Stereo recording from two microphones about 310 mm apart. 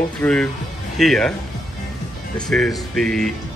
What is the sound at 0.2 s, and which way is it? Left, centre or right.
Speech, centre.